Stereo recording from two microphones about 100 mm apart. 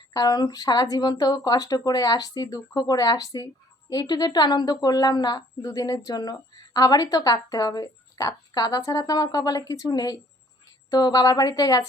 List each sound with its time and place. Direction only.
0.1 s speech: 40° left (ahead or behind)